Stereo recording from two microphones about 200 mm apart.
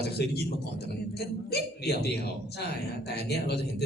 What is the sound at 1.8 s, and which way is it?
A man's voice, 55° left (ahead or behind).